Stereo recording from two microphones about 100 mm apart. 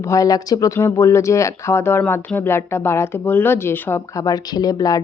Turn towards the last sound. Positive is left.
turn(degrees=40)  # may be behind; listen again after turning